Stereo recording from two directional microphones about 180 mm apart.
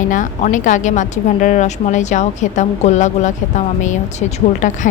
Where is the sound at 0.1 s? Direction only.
45° left (ahead or behind).